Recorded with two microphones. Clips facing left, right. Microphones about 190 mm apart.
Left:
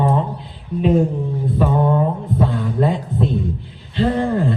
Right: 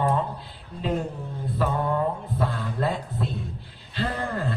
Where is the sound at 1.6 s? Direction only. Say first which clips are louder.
Left 6 dB; 20° left (ahead or behind).